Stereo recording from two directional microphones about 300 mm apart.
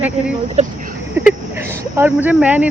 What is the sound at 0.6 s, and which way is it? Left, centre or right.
Speech, right.